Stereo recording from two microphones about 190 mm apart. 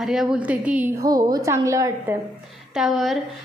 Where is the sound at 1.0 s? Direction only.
20° right (ahead or behind).